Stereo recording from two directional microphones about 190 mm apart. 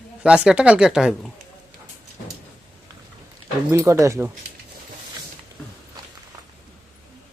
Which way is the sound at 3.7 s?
15° right (ahead or behind).